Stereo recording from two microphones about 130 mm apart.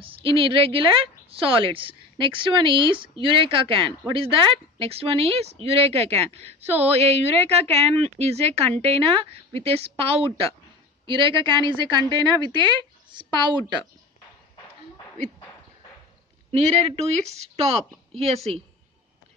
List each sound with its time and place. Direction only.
0.0 s a woman's voice: 45° right (ahead or behind)
16.5 s speech: 50° right (ahead or behind)